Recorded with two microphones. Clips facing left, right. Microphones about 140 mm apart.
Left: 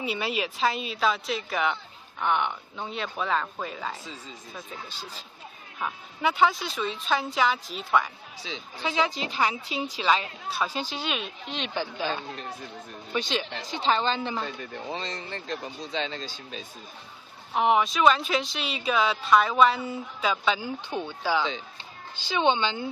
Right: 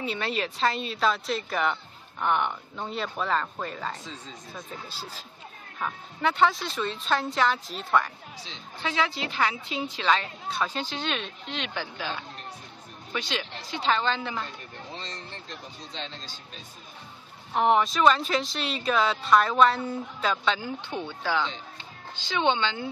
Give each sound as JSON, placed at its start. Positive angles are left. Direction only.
{"t": 0.0, "sound": "a woman's voice", "side_deg": 5}
{"t": 8.7, "sound": "speech", "side_deg": 15}
{"t": 11.5, "sound": "speech", "side_deg": 25}
{"t": 13.1, "sound": "speech", "side_deg": 25}
{"t": 14.6, "sound": "speech", "side_deg": 90}
{"t": 17.6, "sound": "a woman's voice", "side_deg": 5}